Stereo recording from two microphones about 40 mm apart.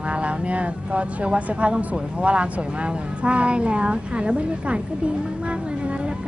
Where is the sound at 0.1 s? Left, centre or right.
Right.